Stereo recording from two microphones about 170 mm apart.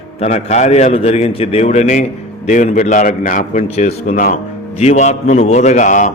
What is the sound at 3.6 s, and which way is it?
A man's voice, 40° left (ahead or behind).